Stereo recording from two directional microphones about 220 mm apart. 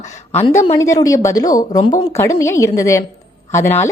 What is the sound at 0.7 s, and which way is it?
A woman's voice, 15° left (ahead or behind).